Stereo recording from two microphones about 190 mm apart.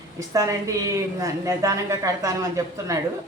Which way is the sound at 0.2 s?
15° right (ahead or behind).